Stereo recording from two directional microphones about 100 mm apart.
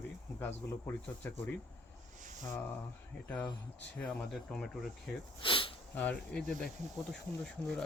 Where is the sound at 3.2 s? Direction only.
15° left (ahead or behind).